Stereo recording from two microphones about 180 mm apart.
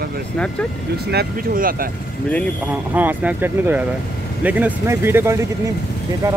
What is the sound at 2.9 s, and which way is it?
Speech, 10° right (ahead or behind).